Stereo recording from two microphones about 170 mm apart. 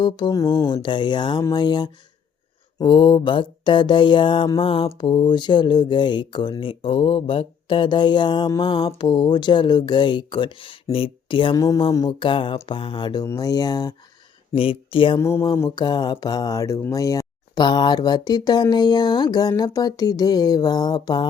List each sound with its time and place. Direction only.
0.0 s speech: 25° left (ahead or behind)
15.2 s speech: 15° left (ahead or behind)